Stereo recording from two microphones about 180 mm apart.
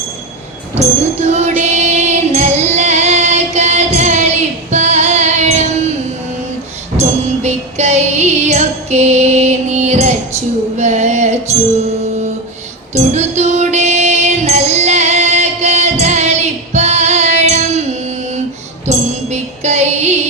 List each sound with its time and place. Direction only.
0.8 s music: 40° right (ahead or behind)
6.9 s music: 40° right (ahead or behind)
12.9 s music: 40° right (ahead or behind)